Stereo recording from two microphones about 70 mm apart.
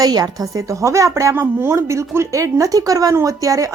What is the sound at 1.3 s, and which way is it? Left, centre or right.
Speech, right.